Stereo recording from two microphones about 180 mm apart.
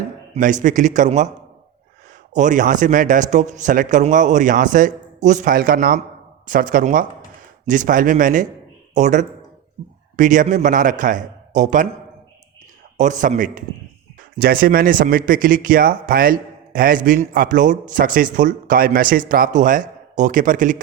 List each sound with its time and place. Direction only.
0.3 s speech: 45° right (ahead or behind)
2.3 s speech: 45° right (ahead or behind)
13.0 s speech: 45° right (ahead or behind)